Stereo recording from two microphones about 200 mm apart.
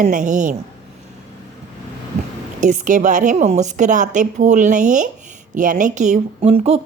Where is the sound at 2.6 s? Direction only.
40° right (ahead or behind).